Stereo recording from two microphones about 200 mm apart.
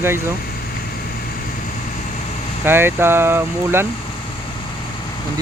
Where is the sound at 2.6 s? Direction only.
10° right (ahead or behind).